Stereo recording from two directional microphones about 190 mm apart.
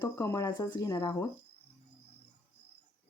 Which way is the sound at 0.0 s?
15° left (ahead or behind).